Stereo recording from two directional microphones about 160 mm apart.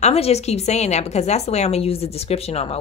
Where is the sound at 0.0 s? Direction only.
40° left (ahead or behind).